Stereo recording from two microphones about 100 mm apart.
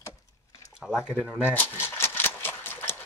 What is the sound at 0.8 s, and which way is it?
Speech, 10° right (ahead or behind).